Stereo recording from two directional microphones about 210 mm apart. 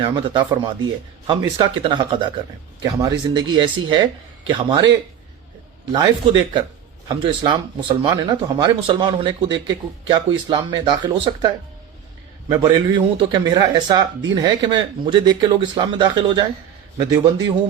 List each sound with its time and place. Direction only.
0.0 s speech: 20° right (ahead or behind)
5.9 s speech: 20° right (ahead or behind)